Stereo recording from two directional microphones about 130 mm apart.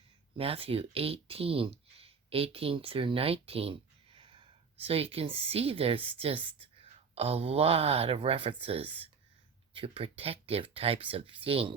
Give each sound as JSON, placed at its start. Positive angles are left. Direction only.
{"t": 0.3, "sound": "speech", "side_deg": -45}